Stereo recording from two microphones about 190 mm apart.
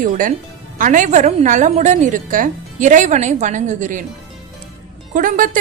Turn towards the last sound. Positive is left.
turn(degrees=-45)  # may be behind; listen again after turning